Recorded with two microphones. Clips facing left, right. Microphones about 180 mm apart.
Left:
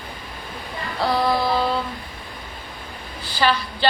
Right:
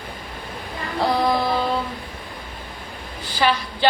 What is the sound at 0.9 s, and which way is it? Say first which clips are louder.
Music: right 1 dB; 20° right (ahead or behind).